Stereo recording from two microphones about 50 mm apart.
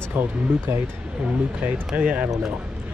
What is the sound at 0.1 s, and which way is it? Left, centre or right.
Speech, right.